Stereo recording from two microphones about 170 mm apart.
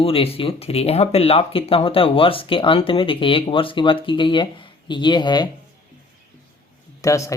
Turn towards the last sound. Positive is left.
turn(degrees=20)  # may be behind; listen again after turning